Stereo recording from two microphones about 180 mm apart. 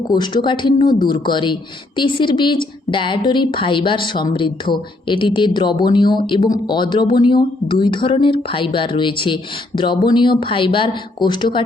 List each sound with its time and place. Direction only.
0.1 s a woman's voice: 25° left (ahead or behind)